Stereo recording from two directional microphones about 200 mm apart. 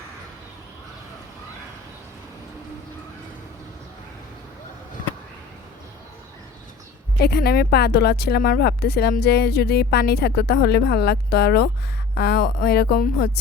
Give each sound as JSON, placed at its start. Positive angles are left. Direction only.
{"t": 7.2, "sound": "speech", "side_deg": 50}